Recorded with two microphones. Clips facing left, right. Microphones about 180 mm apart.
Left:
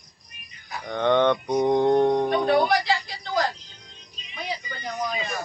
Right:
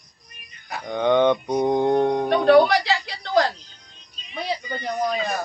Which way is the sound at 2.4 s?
70° right (ahead or behind).